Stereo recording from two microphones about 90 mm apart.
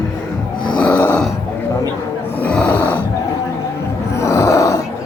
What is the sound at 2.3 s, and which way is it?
Snoring, 15° left (ahead or behind).